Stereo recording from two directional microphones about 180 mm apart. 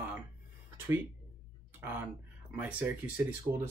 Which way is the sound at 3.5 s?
30° right (ahead or behind).